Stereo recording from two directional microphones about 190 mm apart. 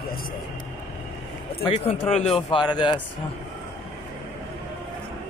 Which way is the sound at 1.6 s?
30° left (ahead or behind).